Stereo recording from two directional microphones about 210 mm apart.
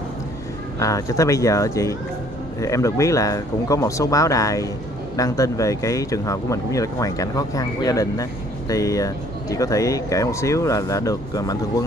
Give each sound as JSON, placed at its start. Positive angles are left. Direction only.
{"t": 0.7, "sound": "speech", "side_deg": 15}